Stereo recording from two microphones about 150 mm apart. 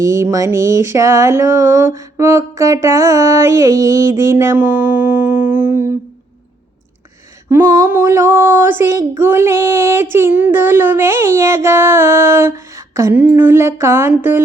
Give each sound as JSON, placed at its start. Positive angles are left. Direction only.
{"t": 0.0, "sound": "a sound", "side_deg": -20}
{"t": 2.1, "sound": "female singing", "side_deg": -20}
{"t": 7.5, "sound": "female singing", "side_deg": -15}